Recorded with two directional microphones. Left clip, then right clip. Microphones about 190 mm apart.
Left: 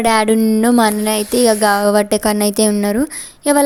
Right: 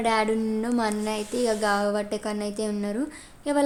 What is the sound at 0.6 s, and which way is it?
Speech, 45° left (ahead or behind).